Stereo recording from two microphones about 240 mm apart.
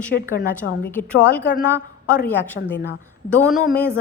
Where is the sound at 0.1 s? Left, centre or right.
Left.